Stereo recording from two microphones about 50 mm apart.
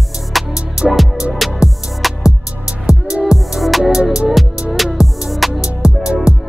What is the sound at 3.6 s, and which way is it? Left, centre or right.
Music, centre.